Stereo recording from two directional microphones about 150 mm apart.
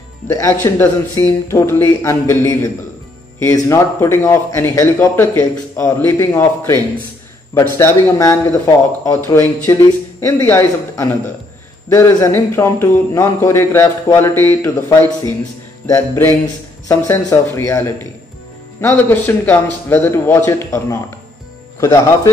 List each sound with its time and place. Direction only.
0.3 s a man's voice: 20° left (ahead or behind)
16.8 s a man's voice: 20° left (ahead or behind)